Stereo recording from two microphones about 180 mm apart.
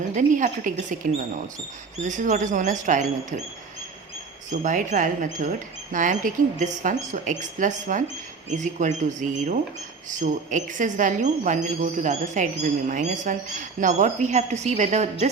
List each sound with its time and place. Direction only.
0.1 s speech: 45° right (ahead or behind)
2.0 s speech: 45° right (ahead or behind)
4.6 s a woman's voice: 45° right (ahead or behind)